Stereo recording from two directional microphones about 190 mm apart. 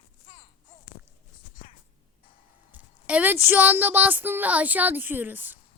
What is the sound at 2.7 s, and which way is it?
Speech, 10° right (ahead or behind).